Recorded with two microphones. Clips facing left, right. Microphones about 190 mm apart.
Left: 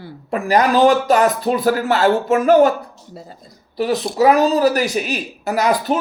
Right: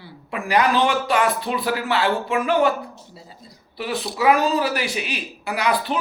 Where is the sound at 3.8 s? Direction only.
40° left (ahead or behind).